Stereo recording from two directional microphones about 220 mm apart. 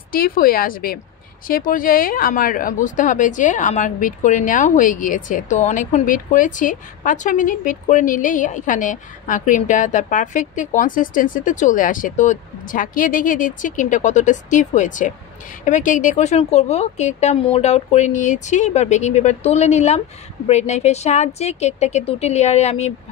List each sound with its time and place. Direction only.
0.1 s speech: 40° left (ahead or behind)